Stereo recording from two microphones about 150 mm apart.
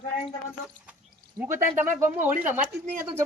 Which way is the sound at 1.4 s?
15° right (ahead or behind).